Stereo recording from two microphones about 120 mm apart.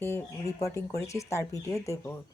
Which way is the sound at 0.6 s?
25° left (ahead or behind).